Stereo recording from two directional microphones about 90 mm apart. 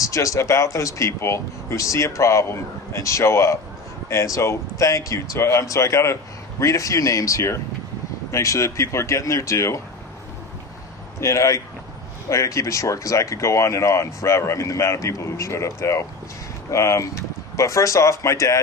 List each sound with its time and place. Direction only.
0.0 s speech: 40° left (ahead or behind)
11.2 s speech: 35° left (ahead or behind)